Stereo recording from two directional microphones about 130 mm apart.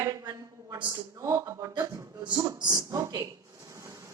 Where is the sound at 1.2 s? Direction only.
25° right (ahead or behind).